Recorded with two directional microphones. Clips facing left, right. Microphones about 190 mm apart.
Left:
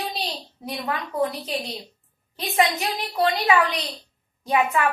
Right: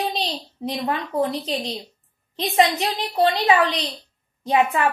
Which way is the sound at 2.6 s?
35° right (ahead or behind).